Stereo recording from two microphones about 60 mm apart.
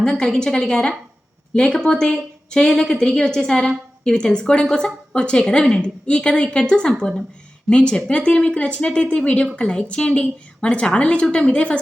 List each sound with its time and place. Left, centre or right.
0.0 s a woman's voice: centre